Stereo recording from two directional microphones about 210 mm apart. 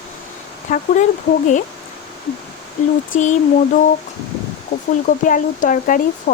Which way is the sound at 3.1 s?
35° left (ahead or behind).